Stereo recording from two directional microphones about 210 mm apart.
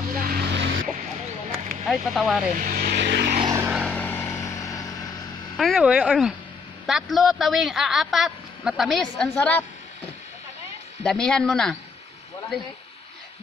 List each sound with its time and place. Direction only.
0.2 s music: 45° right (ahead or behind)
1.5 s vehicle: centre (ahead or behind)
2.5 s vehicle: 40° right (ahead or behind)
3.4 s vehicle: 10° right (ahead or behind)
3.8 s vehicle: 5° left (ahead or behind)
5.6 s a man's voice: centre (ahead or behind)
11.1 s a man's voice: 5° left (ahead or behind)